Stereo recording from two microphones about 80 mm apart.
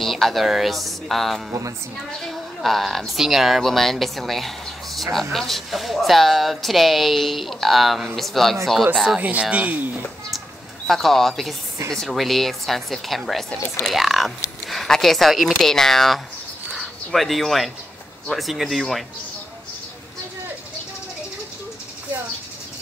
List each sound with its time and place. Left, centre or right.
0.0 s speech: centre
9.2 s speech: centre
10.9 s speech: centre
16.7 s a sound: centre
18.3 s speech: centre